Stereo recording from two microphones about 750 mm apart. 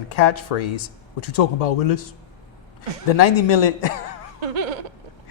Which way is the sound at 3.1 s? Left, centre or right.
Left.